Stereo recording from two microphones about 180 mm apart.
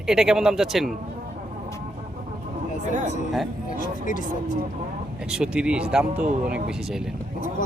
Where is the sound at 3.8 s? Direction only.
45° left (ahead or behind).